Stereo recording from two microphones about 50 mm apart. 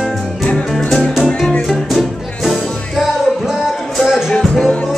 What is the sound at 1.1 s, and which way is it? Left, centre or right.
Music, centre.